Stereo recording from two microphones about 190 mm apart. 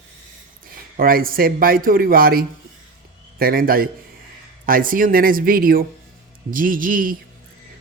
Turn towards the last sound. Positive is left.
turn(degrees=-45)  # may be behind; listen again after turning